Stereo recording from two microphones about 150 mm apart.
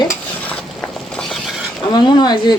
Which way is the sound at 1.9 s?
30° left (ahead or behind).